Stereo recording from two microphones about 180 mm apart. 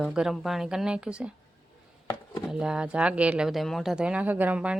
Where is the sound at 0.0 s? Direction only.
5° right (ahead or behind).